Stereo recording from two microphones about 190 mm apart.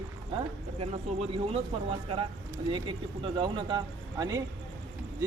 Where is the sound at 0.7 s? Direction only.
30° right (ahead or behind).